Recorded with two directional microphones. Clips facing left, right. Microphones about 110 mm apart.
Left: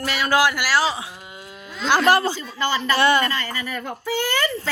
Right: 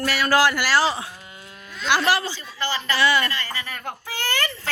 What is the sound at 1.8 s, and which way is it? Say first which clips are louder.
Speech: left 4 dB; 45° left (ahead or behind).